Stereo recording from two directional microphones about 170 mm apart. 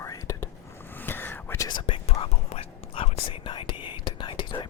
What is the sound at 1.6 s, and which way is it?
Whispering, 30° left (ahead or behind).